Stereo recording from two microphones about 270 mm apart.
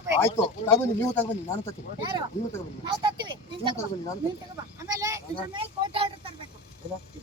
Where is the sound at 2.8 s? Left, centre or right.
Centre.